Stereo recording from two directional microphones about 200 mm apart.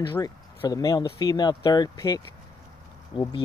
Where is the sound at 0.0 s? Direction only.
20° left (ahead or behind).